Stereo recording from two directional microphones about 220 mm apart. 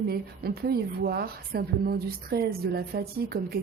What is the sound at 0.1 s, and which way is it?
A woman's voice, 45° right (ahead or behind).